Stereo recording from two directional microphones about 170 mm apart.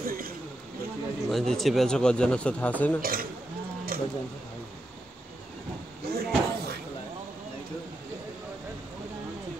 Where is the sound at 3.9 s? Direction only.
60° right (ahead or behind).